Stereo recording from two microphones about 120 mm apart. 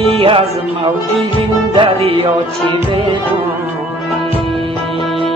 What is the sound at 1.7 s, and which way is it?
Music, 50° right (ahead or behind).